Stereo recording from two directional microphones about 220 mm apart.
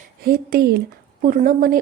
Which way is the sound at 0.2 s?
45° right (ahead or behind).